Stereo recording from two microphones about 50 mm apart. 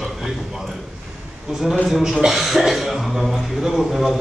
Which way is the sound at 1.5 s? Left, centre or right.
Centre.